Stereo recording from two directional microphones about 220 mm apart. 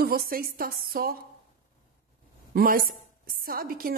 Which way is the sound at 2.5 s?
40° right (ahead or behind).